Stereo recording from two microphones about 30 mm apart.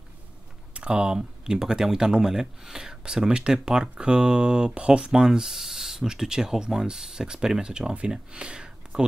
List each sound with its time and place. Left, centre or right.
0.7 s speech: right